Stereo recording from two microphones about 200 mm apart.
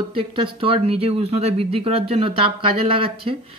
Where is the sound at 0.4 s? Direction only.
25° right (ahead or behind).